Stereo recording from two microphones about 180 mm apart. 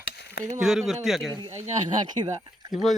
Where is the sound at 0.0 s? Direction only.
65° left (ahead or behind).